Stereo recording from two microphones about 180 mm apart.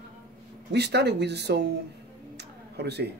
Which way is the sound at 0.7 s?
70° right (ahead or behind).